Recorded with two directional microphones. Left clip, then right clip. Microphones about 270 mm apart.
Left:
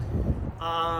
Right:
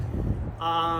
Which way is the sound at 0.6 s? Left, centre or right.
Centre.